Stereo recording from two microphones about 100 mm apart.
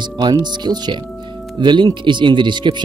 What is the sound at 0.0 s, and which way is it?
Speech, 50° right (ahead or behind).